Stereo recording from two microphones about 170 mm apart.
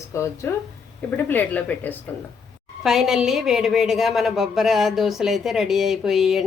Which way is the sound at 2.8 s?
5° right (ahead or behind).